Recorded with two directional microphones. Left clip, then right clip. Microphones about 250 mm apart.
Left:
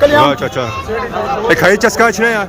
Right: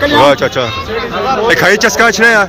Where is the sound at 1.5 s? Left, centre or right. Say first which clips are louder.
Even; centre.